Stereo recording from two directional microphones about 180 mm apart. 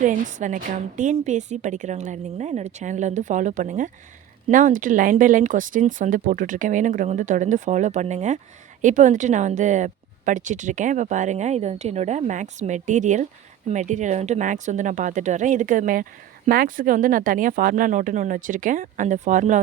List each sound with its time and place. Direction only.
0.0 s a woman's voice: 45° right (ahead or behind)